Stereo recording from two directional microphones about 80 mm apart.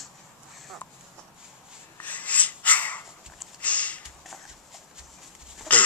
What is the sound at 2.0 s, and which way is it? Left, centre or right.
Sneeze, centre.